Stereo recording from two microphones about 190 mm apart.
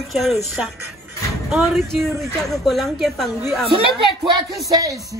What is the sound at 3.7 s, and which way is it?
Speech, 25° right (ahead or behind).